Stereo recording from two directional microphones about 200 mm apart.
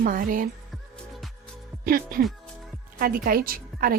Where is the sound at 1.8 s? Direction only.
50° right (ahead or behind).